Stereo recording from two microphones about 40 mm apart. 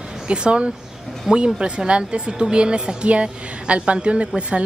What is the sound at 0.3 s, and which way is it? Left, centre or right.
Speech, right.